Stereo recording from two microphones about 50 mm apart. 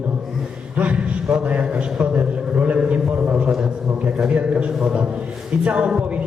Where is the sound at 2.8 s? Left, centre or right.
Right.